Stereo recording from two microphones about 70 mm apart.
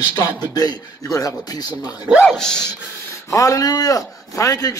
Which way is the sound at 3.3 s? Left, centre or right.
Left.